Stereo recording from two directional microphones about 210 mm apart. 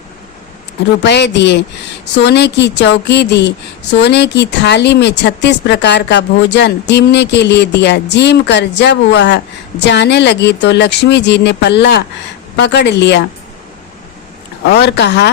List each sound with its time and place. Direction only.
1.0 s speech: 55° left (ahead or behind)
14.6 s speech: 50° left (ahead or behind)